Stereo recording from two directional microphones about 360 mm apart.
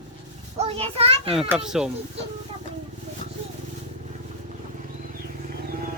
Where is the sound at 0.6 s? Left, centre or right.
Centre.